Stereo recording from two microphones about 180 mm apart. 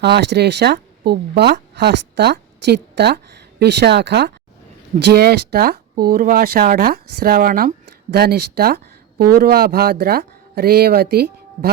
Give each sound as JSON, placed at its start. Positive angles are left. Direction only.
{"t": 0.0, "sound": "speech", "side_deg": -70}